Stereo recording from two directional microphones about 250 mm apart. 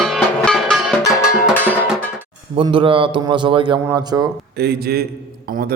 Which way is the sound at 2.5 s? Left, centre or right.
Centre.